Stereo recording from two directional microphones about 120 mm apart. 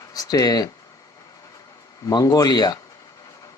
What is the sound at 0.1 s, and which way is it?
Speech, 30° left (ahead or behind).